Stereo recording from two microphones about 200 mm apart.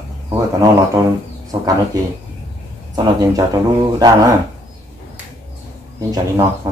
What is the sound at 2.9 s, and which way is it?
Speech, 20° right (ahead or behind).